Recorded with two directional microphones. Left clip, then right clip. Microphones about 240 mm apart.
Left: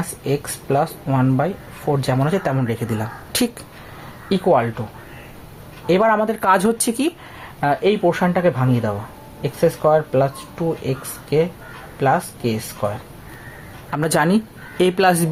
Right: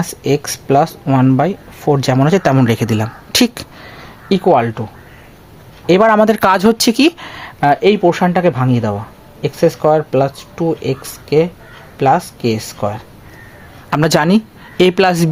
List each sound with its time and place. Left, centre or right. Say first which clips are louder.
0.0 s speech: right 7 dB; right
5.8 s speech: right 6 dB; right